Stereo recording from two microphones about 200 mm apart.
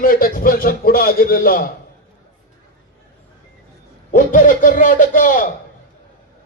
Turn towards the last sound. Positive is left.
turn(degrees=40)  # may be behind; listen again after turning